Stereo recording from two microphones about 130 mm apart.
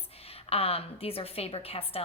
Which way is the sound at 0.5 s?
50° left (ahead or behind).